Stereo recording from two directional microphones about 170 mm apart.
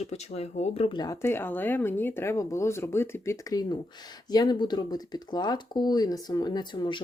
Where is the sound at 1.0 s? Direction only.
15° left (ahead or behind).